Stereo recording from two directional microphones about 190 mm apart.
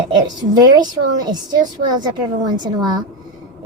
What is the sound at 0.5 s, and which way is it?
Speech, 20° right (ahead or behind).